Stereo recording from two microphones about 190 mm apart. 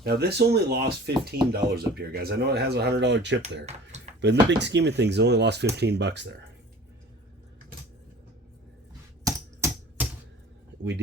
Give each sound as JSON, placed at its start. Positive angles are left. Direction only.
{"t": 0.0, "sound": "speech", "side_deg": -55}
{"t": 3.7, "sound": "speech", "side_deg": -35}
{"t": 4.2, "sound": "speech", "side_deg": -65}
{"t": 9.2, "sound": "typewriter", "side_deg": -10}